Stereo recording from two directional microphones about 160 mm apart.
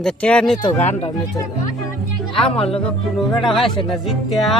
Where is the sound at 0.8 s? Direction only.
45° left (ahead or behind).